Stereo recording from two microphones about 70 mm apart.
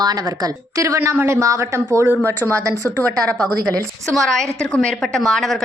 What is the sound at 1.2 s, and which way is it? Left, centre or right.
Speech, right.